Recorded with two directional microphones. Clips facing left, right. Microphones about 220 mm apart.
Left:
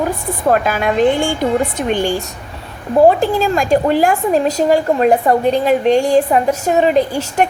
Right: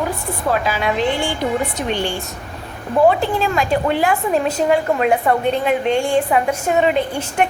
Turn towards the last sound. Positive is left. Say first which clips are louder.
# left 3 dB
turn(degrees=40)  # may be behind; listen again after turning